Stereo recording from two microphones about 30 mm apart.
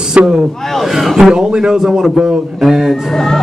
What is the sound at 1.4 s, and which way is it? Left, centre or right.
Speech, right.